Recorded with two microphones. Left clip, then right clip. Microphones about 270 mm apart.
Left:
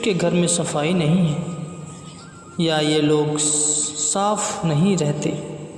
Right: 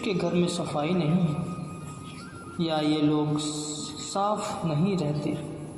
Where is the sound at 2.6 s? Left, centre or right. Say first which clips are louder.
Left 7 dB; left.